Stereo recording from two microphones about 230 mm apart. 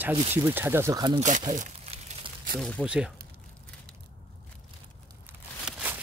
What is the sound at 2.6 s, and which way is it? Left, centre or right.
Speech, centre.